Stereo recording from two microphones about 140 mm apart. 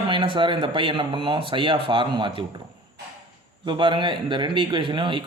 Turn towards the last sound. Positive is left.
turn(degrees=-35)  # may be behind; listen again after turning